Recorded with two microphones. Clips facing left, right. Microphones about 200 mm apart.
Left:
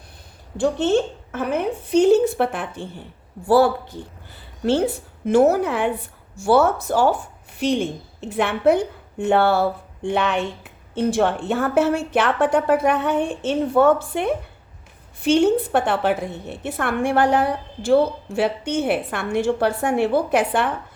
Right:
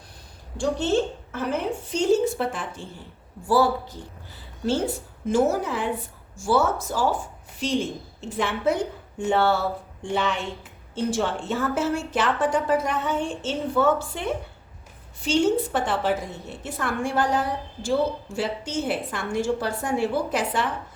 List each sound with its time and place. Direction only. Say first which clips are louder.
0.6 s a woman's voice: left 4 dB; 55° left (ahead or behind)